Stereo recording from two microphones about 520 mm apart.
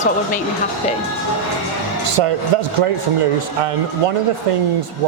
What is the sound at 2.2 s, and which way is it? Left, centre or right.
Speech, right.